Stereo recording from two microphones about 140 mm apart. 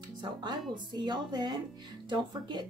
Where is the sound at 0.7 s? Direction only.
30° right (ahead or behind).